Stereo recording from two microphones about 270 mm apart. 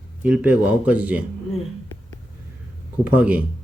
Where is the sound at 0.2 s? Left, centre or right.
Centre.